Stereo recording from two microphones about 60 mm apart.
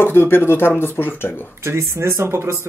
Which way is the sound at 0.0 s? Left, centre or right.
Left.